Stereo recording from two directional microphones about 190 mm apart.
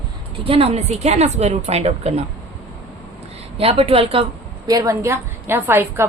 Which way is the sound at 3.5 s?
30° right (ahead or behind).